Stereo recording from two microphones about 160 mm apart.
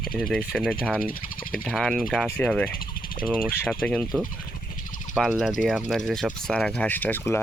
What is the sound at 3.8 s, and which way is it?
Speech, 5° left (ahead or behind).